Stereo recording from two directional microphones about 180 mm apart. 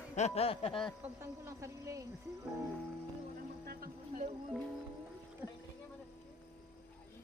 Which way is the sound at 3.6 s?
55° right (ahead or behind).